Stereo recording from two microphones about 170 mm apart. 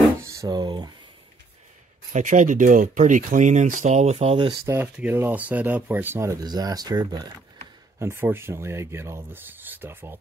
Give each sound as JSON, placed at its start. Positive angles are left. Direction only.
{"t": 0.2, "sound": "a sound", "side_deg": -20}
{"t": 2.1, "sound": "speech", "side_deg": -50}
{"t": 4.9, "sound": "speech", "side_deg": -10}
{"t": 8.0, "sound": "speech", "side_deg": -15}